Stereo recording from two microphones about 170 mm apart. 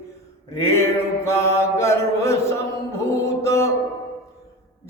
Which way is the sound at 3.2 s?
15° left (ahead or behind).